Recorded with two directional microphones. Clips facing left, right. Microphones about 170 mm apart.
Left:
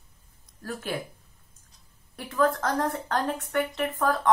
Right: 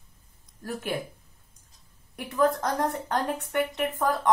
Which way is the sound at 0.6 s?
15° right (ahead or behind).